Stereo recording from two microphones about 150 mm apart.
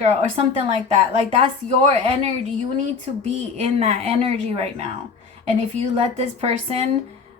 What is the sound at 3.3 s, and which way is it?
A woman's voice, 45° right (ahead or behind).